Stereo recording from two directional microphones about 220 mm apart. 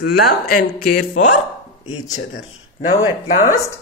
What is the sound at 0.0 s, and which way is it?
Speech, 45° left (ahead or behind).